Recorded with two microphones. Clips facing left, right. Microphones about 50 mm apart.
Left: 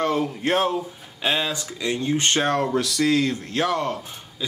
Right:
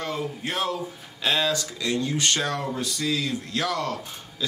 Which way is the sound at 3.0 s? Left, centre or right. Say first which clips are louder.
Left 7 dB; left.